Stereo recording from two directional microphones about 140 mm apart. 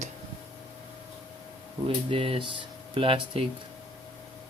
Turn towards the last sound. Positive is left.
turn(degrees=-40)  # may be behind; listen again after turning